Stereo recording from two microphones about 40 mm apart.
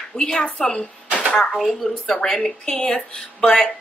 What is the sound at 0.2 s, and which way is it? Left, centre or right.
Speech, centre.